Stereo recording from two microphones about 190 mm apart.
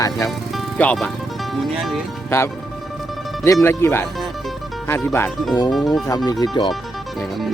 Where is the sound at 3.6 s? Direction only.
10° left (ahead or behind).